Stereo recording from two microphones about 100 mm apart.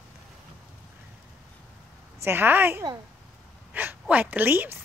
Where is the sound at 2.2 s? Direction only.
25° right (ahead or behind).